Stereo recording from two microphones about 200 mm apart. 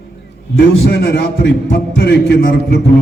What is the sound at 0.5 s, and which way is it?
A man's voice, 55° left (ahead or behind).